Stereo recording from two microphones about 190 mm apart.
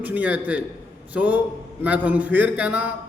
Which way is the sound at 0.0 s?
10° right (ahead or behind).